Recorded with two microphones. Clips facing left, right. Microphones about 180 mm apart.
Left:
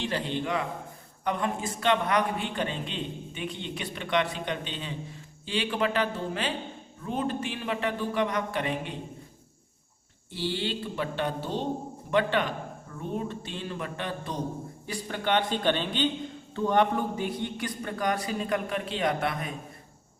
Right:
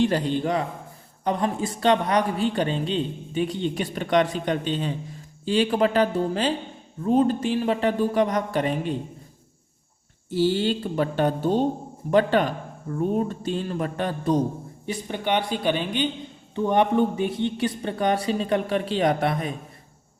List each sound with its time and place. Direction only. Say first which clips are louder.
0.0 s a man's voice: right 8 dB; 45° right (ahead or behind)
10.2 s a man's voice: right 10 dB; 45° right (ahead or behind)
14.8 s speech: right 3 dB; 20° right (ahead or behind); by 19.5 s 35° right (ahead or behind)